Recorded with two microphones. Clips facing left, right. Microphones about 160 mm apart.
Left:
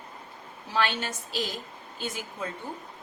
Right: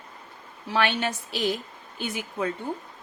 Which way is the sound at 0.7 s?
65° right (ahead or behind).